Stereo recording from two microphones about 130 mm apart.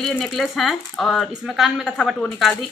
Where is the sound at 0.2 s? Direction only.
Centre (ahead or behind).